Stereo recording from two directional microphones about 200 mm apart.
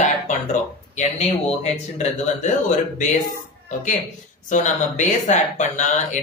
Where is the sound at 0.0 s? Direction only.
35° left (ahead or behind).